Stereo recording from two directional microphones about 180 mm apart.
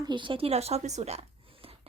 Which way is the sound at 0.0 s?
25° right (ahead or behind).